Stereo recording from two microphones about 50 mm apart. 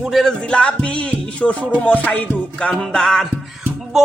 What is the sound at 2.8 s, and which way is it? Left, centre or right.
Music, centre.